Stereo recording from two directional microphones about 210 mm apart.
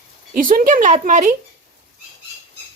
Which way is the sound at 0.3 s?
40° right (ahead or behind).